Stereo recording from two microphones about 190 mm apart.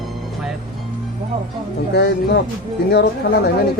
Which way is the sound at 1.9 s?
60° left (ahead or behind).